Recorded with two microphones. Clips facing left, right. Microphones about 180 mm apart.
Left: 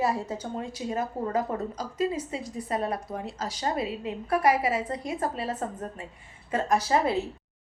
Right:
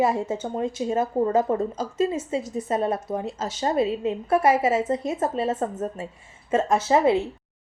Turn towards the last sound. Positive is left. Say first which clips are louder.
# right 5 dB
turn(degrees=-25)  # may be behind; listen again after turning